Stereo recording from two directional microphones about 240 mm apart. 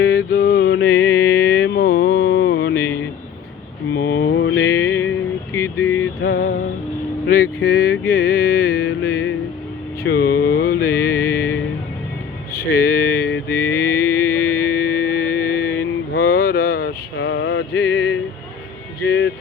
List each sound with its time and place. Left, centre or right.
0.3 s mantra: left
2.7 s a sound: centre
3.9 s mantra: left
6.2 s music: left
7.3 s vehicle: left
8.1 s music: left
10.0 s mantra: left
10.8 s music: centre
12.5 s a sound: left
13.1 s mantra: centre
16.1 s a sound: left